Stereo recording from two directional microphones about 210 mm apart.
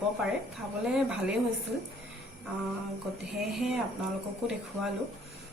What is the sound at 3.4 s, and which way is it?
Speech, centre (ahead or behind).